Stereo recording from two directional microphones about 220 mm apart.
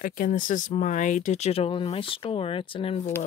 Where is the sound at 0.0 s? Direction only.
40° left (ahead or behind).